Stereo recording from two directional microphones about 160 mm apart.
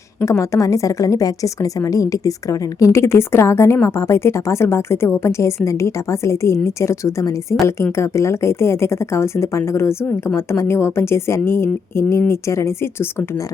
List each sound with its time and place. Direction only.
0.2 s a woman's voice: 20° left (ahead or behind)